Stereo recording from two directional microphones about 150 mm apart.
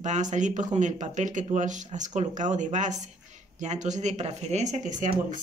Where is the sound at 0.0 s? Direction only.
50° right (ahead or behind).